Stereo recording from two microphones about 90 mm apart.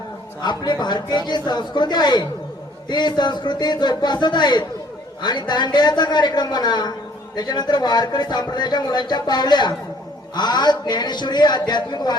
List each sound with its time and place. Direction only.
0.4 s a man's voice: 55° left (ahead or behind)